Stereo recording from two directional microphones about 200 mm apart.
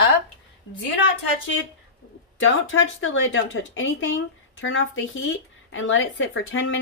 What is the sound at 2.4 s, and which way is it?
Speech, 75° left (ahead or behind).